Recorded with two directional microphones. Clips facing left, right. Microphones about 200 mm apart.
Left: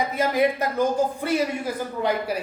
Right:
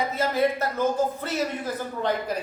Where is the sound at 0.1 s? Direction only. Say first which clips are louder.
Left 2 dB; 15° left (ahead or behind).